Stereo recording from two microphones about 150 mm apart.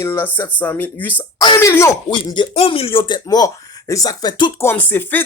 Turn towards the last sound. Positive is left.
turn(degrees=15)  # may be behind; listen again after turning